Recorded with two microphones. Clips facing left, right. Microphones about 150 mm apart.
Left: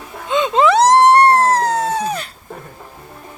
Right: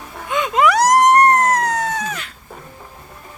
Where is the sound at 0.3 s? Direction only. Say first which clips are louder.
Left 2 dB; 25° left (ahead or behind).